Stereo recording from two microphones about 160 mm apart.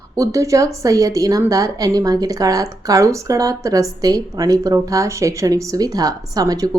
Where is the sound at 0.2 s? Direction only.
20° right (ahead or behind).